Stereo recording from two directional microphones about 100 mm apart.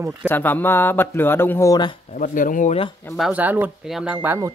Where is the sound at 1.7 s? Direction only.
50° left (ahead or behind).